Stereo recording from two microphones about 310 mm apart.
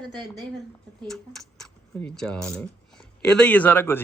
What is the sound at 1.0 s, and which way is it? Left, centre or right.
Speech, centre.